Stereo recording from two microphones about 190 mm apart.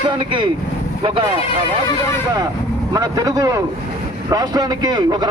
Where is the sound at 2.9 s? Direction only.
20° right (ahead or behind).